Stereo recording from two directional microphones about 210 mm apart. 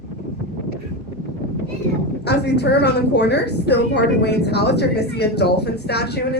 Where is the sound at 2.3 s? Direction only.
55° left (ahead or behind).